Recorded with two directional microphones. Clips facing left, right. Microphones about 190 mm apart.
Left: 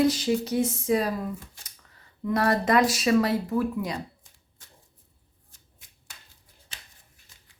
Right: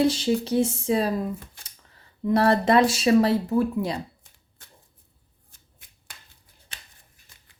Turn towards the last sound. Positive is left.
turn(degrees=-60)  # may be behind; listen again after turning